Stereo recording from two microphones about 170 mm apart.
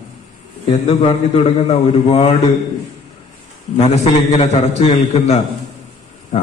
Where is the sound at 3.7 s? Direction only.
40° left (ahead or behind).